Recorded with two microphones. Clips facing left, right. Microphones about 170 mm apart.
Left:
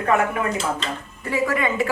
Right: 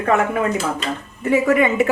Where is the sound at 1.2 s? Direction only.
20° right (ahead or behind).